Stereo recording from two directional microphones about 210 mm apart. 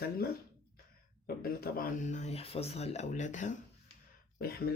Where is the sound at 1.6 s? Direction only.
45° left (ahead or behind).